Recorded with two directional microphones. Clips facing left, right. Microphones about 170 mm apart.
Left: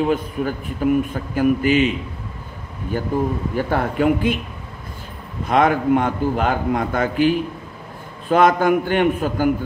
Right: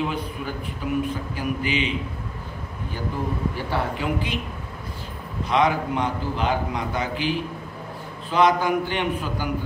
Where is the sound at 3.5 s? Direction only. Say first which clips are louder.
Left 7 dB; 50° left (ahead or behind).